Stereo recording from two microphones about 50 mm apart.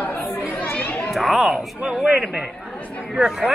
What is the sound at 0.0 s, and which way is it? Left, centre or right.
Chatter, left.